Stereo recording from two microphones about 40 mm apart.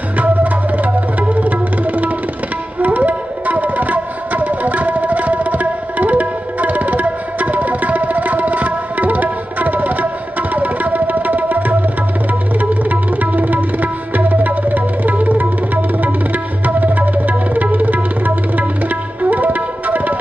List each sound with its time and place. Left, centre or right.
0.2 s music: right
2.8 s tabla: right
10.5 s music: right
13.1 s tabla: right